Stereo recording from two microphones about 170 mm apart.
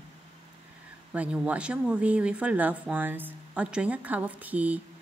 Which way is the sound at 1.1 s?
10° right (ahead or behind).